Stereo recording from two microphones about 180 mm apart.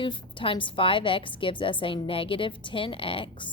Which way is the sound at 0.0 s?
30° left (ahead or behind).